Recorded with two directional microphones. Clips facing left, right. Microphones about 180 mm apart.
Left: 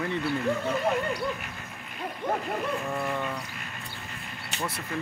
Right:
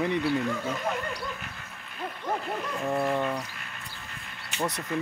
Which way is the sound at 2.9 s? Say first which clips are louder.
Right 4 dB; 20° right (ahead or behind).